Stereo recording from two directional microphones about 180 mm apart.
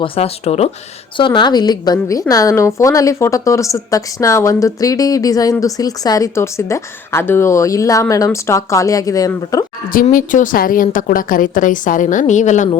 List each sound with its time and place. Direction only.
0.0 s a woman's voice: 35° left (ahead or behind); by 9.6 s 20° left (ahead or behind)
9.9 s a woman's voice: 50° left (ahead or behind)